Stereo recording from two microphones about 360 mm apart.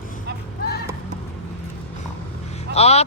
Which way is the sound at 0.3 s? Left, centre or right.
Right.